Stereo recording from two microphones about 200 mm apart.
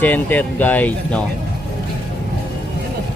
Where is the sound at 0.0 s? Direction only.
10° left (ahead or behind).